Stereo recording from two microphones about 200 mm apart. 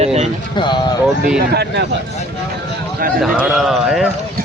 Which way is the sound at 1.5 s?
55° right (ahead or behind).